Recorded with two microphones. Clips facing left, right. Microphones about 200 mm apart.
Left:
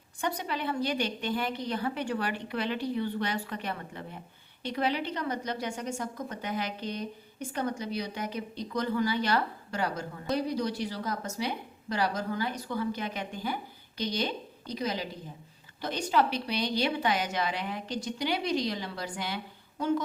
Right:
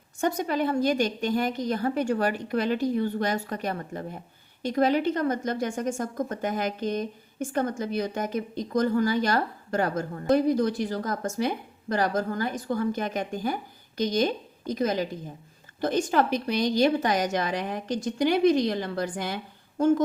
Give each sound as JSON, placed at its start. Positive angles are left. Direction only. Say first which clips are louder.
{"t": 0.2, "sound": "a woman's voice", "louder": "right 7 dB", "side_deg": -45}